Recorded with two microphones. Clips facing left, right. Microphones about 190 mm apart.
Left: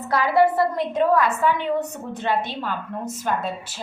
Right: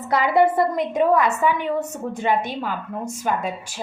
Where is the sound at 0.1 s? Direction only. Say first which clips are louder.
Right 1 dB; 20° right (ahead or behind).